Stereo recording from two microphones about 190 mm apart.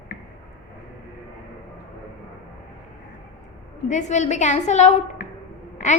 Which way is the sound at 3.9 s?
40° left (ahead or behind).